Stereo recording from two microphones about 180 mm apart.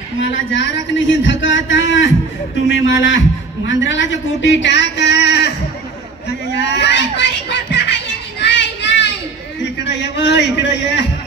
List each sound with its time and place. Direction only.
0.2 s speech: 90° left; by 5.5 s 70° left (ahead or behind)
6.6 s speech: 75° left (ahead or behind)
8.4 s child singing: 70° left (ahead or behind)
9.8 s a man's voice: 75° left (ahead or behind)